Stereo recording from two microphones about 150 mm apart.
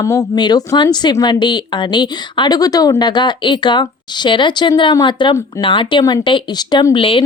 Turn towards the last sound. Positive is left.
turn(degrees=35)  # may be behind; listen again after turning